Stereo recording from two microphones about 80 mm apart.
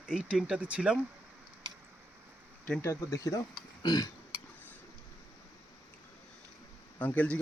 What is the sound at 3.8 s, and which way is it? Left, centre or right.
Burping, left.